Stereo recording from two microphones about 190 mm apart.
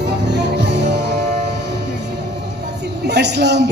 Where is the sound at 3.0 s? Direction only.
60° right (ahead or behind).